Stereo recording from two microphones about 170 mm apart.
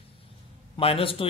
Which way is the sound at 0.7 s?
30° left (ahead or behind).